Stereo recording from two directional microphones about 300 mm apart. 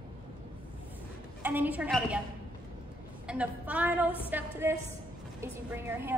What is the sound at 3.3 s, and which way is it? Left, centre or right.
A woman's voice, centre.